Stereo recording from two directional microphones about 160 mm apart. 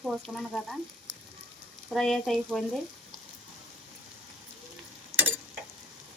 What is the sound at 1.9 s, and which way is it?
Frying, centre (ahead or behind).